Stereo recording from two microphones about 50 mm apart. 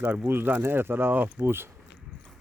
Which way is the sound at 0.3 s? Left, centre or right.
Right.